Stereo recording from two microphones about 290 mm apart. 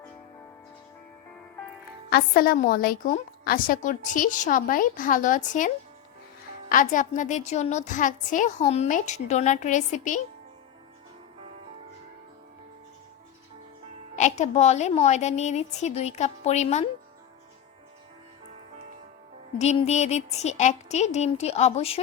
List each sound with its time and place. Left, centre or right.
2.0 s a woman's voice: left
14.2 s a woman's voice: left
19.5 s a woman's voice: left